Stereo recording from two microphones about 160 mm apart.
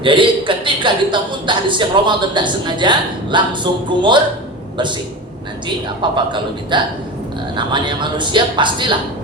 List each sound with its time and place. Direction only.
0.0 s a woman's voice: 30° right (ahead or behind)
6.0 s a woman's voice: 30° right (ahead or behind)